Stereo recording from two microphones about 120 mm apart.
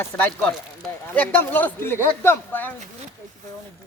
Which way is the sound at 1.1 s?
15° left (ahead or behind).